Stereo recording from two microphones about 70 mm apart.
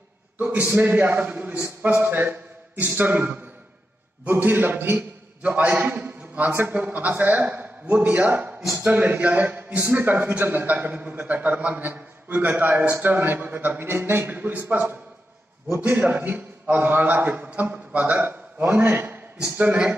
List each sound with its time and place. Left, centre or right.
0.4 s a man's voice: right